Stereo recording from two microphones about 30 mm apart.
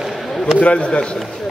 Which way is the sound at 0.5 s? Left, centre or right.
Left.